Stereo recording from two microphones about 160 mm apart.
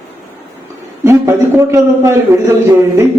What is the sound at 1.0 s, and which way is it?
A man's voice, 15° right (ahead or behind).